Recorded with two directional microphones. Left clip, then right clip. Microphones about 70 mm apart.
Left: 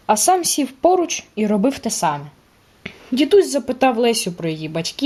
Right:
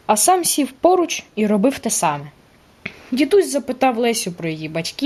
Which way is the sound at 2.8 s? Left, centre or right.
Centre.